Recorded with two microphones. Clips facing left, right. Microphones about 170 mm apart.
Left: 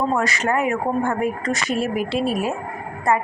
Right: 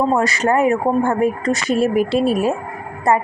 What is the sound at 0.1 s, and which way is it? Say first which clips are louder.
Speech: right 4 dB; 35° right (ahead or behind).